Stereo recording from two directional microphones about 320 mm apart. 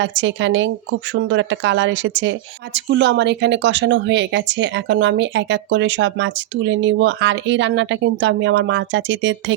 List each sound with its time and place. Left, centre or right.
0.0 s speech: right